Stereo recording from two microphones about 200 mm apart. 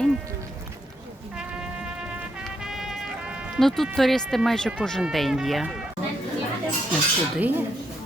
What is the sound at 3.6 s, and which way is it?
Speech, centre (ahead or behind).